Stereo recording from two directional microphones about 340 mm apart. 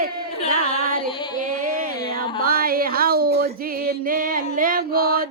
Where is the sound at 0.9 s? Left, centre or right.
Right.